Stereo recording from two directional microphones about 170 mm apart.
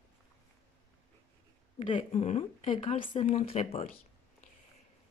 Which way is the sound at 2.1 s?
40° left (ahead or behind).